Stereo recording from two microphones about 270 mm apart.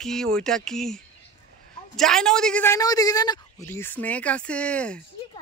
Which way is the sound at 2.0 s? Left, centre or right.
Centre.